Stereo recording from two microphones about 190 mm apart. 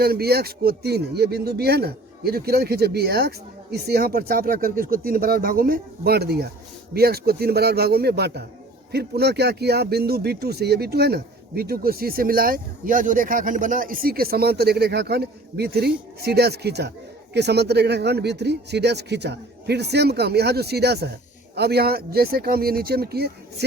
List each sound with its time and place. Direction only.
0.0 s speech: 55° right (ahead or behind)